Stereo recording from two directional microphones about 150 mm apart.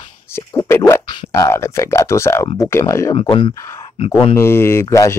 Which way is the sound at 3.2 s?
35° left (ahead or behind).